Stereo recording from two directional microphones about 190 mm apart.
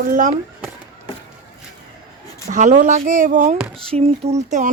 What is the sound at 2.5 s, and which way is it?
Speech, 40° right (ahead or behind).